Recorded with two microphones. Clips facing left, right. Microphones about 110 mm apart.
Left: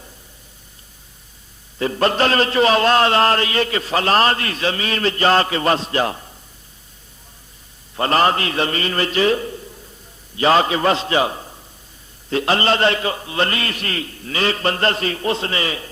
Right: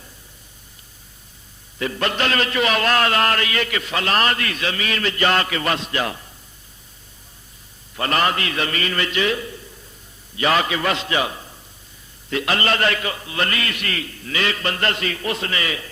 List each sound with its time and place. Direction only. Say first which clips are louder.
1.8 s a man's voice: left 5 dB; 35° left (ahead or behind)
7.9 s a man's voice: left 4 dB; 30° left (ahead or behind)